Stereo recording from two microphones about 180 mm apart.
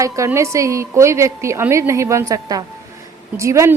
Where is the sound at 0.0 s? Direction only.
15° right (ahead or behind).